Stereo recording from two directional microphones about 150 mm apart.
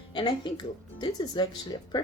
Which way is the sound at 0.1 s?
30° left (ahead or behind).